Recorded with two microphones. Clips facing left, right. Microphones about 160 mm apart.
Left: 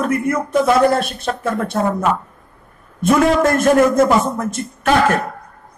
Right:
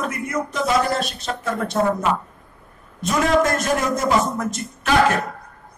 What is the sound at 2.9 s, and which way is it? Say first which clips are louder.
A man's voice: left 5 dB; 55° left (ahead or behind).